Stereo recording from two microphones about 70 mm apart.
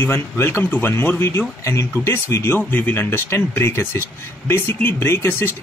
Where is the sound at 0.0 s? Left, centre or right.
Left.